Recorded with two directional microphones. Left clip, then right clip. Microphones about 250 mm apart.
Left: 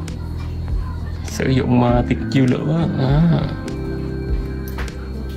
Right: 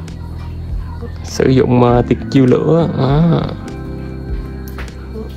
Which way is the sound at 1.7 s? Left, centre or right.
Left.